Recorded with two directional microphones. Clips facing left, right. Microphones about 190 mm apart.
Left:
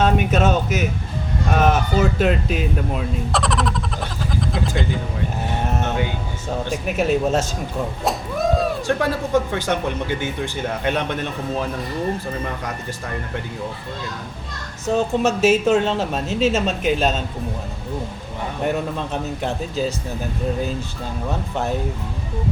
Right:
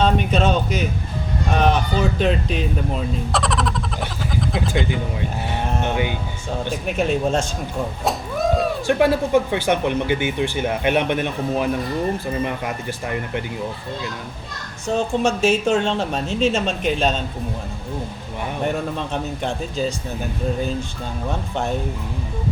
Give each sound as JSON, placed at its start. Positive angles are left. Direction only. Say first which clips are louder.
{"t": 0.0, "sound": "a man's voice", "louder": "left 1 dB", "side_deg": 5}
{"t": 5.8, "sound": "speech", "louder": "right 1 dB", "side_deg": -20}
{"t": 6.7, "sound": "speech", "louder": "left 1 dB", "side_deg": 5}
{"t": 8.0, "sound": "a sound", "louder": "even", "side_deg": 0}
{"t": 9.5, "sound": "speech", "louder": "right 3 dB", "side_deg": -15}
{"t": 14.8, "sound": "speech", "louder": "left 1 dB", "side_deg": 5}
{"t": 18.6, "sound": "speech", "louder": "left 1 dB", "side_deg": 5}